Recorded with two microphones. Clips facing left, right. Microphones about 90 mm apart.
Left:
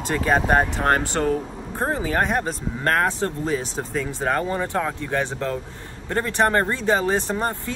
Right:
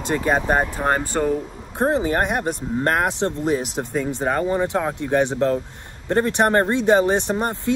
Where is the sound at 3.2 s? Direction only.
30° right (ahead or behind).